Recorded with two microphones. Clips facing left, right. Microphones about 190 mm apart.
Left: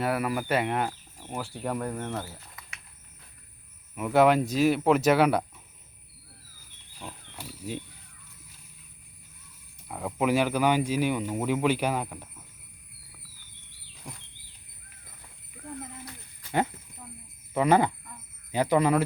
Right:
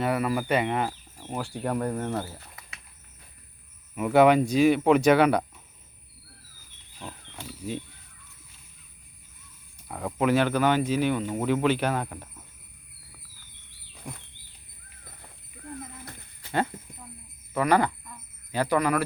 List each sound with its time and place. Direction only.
0.0 s speech: 5° left (ahead or behind)
3.9 s speech: centre (ahead or behind)
7.0 s wild animals: 5° left (ahead or behind)
9.9 s speech: 5° left (ahead or behind)
14.0 s speech: 5° right (ahead or behind)
15.6 s a sound: 5° left (ahead or behind)
17.5 s speech: 20° left (ahead or behind)